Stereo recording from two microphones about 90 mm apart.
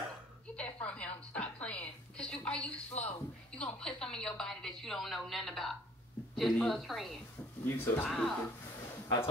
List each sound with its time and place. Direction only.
0.6 s a sound: 15° left (ahead or behind)
2.4 s a woman's voice: 10° left (ahead or behind)
7.6 s speech: 25° left (ahead or behind)
8.1 s a woman's voice: 5° left (ahead or behind)